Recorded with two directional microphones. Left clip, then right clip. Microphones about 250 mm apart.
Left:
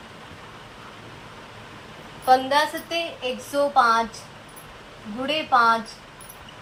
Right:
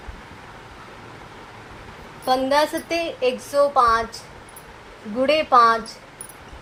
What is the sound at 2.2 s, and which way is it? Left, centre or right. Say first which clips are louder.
A woman's voice: even; right.